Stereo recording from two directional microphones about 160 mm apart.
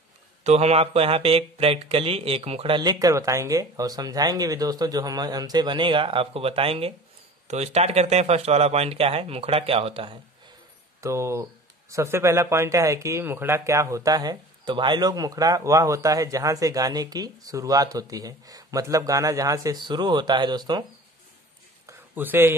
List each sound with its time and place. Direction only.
0.4 s speech: 40° right (ahead or behind)
11.0 s a man's voice: 20° right (ahead or behind)
21.8 s a sound: 10° right (ahead or behind)